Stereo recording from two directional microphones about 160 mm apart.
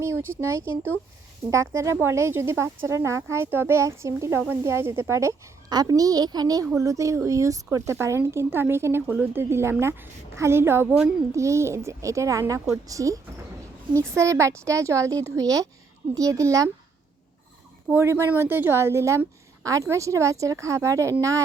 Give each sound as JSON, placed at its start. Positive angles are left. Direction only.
{"t": 0.0, "sound": "a woman's voice", "side_deg": -15}
{"t": 17.8, "sound": "a woman's voice", "side_deg": -15}